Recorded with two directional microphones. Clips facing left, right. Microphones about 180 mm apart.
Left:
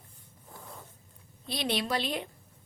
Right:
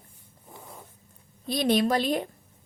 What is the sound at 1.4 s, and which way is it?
Speech, 45° right (ahead or behind).